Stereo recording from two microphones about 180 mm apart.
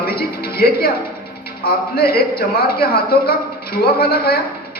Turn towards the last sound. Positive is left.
turn(degrees=60)  # may be behind; listen again after turning